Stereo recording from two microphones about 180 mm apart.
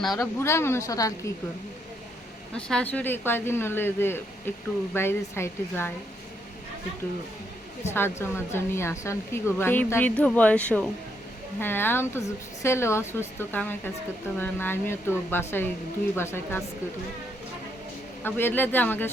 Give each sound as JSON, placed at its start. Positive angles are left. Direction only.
{"t": 0.1, "sound": "speech", "side_deg": 15}
{"t": 2.6, "sound": "speech", "side_deg": 5}
{"t": 7.9, "sound": "speech", "side_deg": 15}
{"t": 18.2, "sound": "speech", "side_deg": 10}